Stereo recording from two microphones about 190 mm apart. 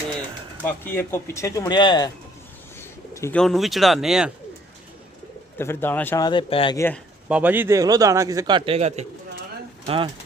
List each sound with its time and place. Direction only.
0.6 s speech: 10° left (ahead or behind)
2.7 s bird: 15° left (ahead or behind)
3.4 s speech: centre (ahead or behind)
5.5 s speech: 10° left (ahead or behind)
6.7 s speech: 10° left (ahead or behind)
7.3 s a man's voice: 5° right (ahead or behind); by 10.1 s 30° right (ahead or behind)